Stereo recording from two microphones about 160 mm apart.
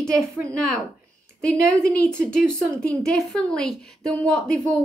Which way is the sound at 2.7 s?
5° left (ahead or behind).